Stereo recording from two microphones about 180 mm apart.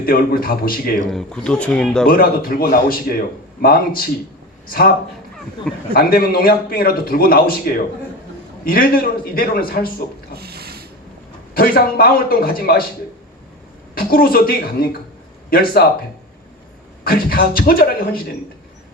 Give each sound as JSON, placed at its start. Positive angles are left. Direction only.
{"t": 0.0, "sound": "a man's voice", "side_deg": 55}
{"t": 1.1, "sound": "speech", "side_deg": 5}
{"t": 2.0, "sound": "a man's voice", "side_deg": 55}
{"t": 5.9, "sound": "a man's voice", "side_deg": 55}
{"t": 10.3, "sound": "a sound", "side_deg": -60}
{"t": 11.5, "sound": "a man's voice", "side_deg": 55}
{"t": 13.9, "sound": "a man's voice", "side_deg": 55}
{"t": 17.0, "sound": "a man's voice", "side_deg": 55}